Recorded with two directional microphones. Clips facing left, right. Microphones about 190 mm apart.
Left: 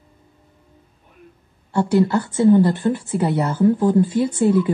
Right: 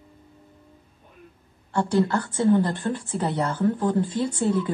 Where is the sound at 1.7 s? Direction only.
10° left (ahead or behind).